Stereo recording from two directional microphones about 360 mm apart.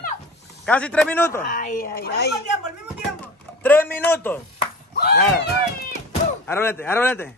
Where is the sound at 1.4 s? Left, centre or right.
Left.